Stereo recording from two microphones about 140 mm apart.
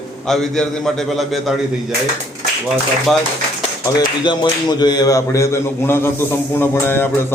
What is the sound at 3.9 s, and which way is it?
A man's voice, 35° left (ahead or behind).